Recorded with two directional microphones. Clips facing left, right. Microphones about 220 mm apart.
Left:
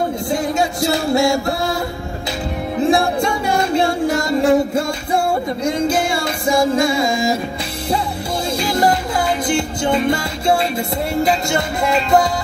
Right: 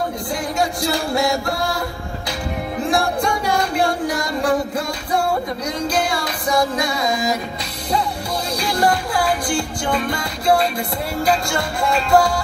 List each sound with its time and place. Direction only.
0.3 s music: 25° left (ahead or behind)
2.9 s music: 25° left (ahead or behind)
8.5 s music: 20° left (ahead or behind)